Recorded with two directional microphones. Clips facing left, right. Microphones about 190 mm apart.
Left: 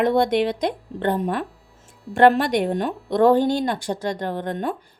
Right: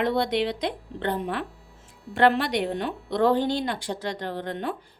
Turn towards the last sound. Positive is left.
turn(degrees=45)  # may be behind; listen again after turning